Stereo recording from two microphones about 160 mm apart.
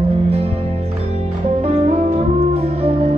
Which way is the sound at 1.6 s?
40° right (ahead or behind).